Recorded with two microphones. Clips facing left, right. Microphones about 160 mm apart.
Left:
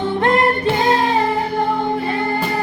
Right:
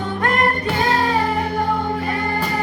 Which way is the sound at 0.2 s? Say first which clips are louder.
Left 3 dB; 25° left (ahead or behind).